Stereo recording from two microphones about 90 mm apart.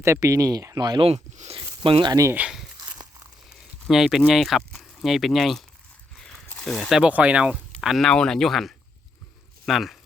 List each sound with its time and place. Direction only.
0.0 s speech: 35° right (ahead or behind)
0.8 s speech: 55° right (ahead or behind)
1.0 s speech: 80° right
2.4 s speech: 15° right (ahead or behind)
3.8 s speech: 5° right (ahead or behind)
6.1 s a sound: 5° left (ahead or behind)
6.6 s speech: 5° left (ahead or behind)
7.0 s speech: 15° right (ahead or behind)
7.8 s speech: centre (ahead or behind)